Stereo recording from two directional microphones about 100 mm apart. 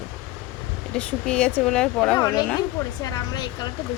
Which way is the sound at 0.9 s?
10° left (ahead or behind).